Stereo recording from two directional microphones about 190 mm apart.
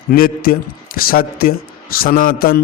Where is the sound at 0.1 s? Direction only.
50° left (ahead or behind).